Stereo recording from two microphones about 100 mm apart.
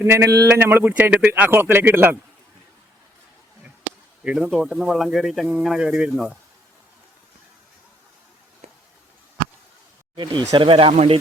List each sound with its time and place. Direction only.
0.0 s speech: 25° right (ahead or behind)
4.2 s speech: 10° right (ahead or behind)
10.2 s speech: 50° right (ahead or behind)
10.7 s speech: 70° right (ahead or behind)